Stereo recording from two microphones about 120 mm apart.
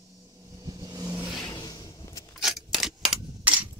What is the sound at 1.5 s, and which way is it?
Vehicle, 35° left (ahead or behind).